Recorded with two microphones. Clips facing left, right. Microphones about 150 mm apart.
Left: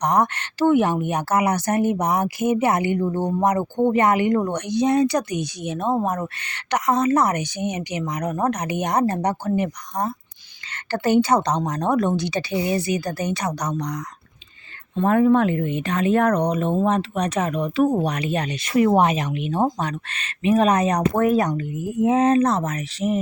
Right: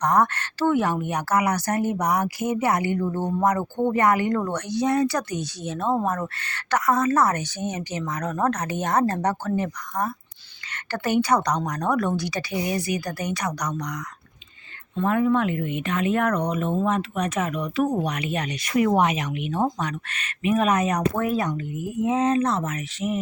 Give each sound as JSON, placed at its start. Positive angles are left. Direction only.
{"t": 0.0, "sound": "speech", "side_deg": 20}
{"t": 10.9, "sound": "a woman's voice", "side_deg": 30}
{"t": 15.0, "sound": "speech", "side_deg": 40}
{"t": 22.0, "sound": "speech", "side_deg": 65}
{"t": 22.4, "sound": "speech", "side_deg": 40}